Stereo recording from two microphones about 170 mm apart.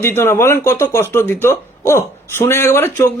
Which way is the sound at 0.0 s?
15° left (ahead or behind).